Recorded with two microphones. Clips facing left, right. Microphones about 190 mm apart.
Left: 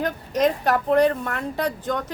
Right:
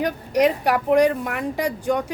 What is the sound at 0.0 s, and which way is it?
Speech, 15° right (ahead or behind).